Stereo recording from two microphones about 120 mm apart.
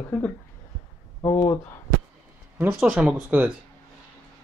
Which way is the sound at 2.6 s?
10° right (ahead or behind).